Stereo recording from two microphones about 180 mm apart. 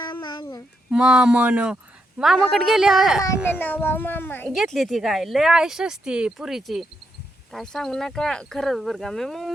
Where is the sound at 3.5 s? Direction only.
10° left (ahead or behind).